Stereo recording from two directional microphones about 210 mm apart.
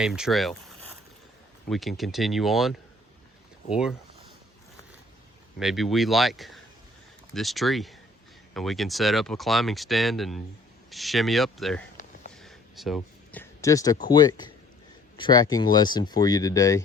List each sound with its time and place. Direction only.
0.0 s speech: centre (ahead or behind)
1.7 s speech: centre (ahead or behind)
5.5 s speech: centre (ahead or behind)
12.3 s a sound: centre (ahead or behind)
13.4 s speech: 15° left (ahead or behind)